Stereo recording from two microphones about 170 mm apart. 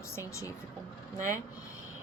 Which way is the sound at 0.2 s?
15° left (ahead or behind).